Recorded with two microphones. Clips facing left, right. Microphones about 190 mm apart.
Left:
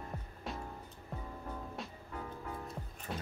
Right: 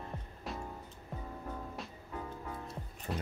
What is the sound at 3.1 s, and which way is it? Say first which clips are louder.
Music: right 4 dB; centre (ahead or behind).